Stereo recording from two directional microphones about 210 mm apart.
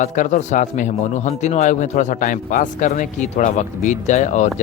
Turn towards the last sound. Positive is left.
turn(degrees=35)  # may be behind; listen again after turning